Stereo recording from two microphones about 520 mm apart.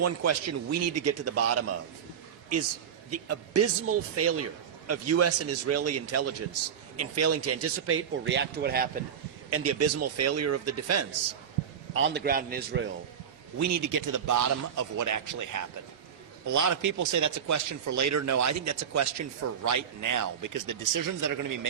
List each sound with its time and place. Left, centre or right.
0.0 s a man's voice: right
3.1 s a man's voice: right
13.6 s speech: right